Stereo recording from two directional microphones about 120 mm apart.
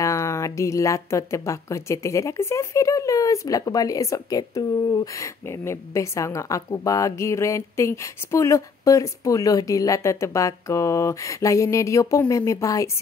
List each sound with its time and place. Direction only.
0.0 s speech: 25° left (ahead or behind)